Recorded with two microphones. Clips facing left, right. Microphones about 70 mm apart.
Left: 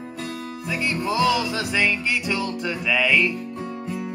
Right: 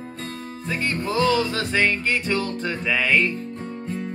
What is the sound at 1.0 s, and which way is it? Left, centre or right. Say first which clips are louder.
Mantra: even; centre.